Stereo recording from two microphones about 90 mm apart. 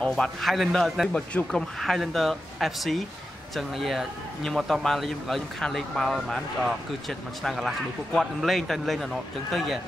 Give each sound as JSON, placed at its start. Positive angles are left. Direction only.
{"t": 0.1, "sound": "a man's voice", "side_deg": 0}